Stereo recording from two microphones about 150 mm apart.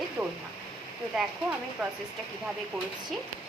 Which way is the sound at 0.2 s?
15° right (ahead or behind).